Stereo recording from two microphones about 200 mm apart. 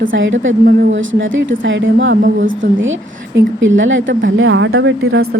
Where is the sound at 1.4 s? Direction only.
70° right (ahead or behind).